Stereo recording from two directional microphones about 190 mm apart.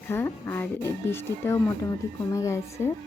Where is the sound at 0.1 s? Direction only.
10° left (ahead or behind).